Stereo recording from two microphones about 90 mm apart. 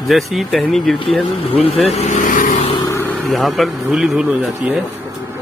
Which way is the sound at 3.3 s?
Centre (ahead or behind).